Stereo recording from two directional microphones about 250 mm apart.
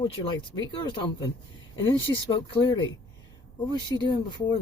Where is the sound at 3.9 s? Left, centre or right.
Centre.